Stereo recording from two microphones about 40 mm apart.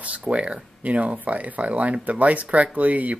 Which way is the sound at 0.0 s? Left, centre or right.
Right.